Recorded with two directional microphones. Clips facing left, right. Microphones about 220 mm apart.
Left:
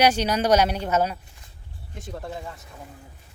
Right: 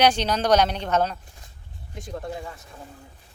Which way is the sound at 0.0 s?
10° left (ahead or behind).